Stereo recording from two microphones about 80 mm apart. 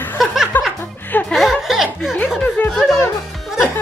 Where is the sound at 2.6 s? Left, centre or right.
Left.